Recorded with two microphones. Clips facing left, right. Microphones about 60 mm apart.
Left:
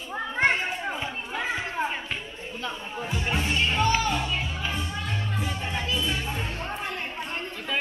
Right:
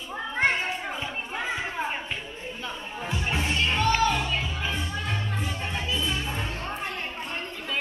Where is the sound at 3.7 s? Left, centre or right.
Centre.